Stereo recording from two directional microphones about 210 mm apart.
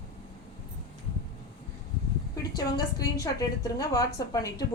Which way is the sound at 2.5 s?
15° left (ahead or behind).